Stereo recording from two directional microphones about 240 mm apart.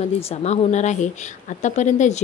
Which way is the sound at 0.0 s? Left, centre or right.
Left.